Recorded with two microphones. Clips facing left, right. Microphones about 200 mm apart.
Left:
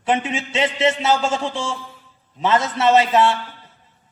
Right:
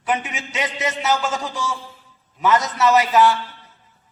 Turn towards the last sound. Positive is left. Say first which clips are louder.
# even
turn(degrees=30)  # may be behind; listen again after turning